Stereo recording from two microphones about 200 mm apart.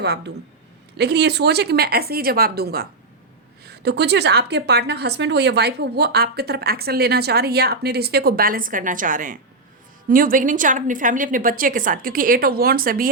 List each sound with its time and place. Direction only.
0.9 s a woman's voice: 55° right (ahead or behind)